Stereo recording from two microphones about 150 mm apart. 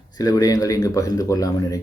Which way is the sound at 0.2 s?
25° left (ahead or behind).